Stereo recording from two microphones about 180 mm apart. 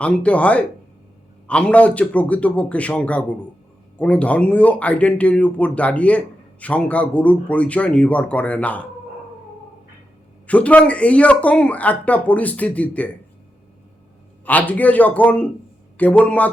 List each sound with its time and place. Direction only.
0.0 s speech: 5° left (ahead or behind)
10.4 s speech: 10° left (ahead or behind)
14.4 s speech: 10° left (ahead or behind)